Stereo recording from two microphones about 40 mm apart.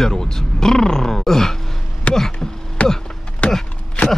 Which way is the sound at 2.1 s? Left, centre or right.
Left.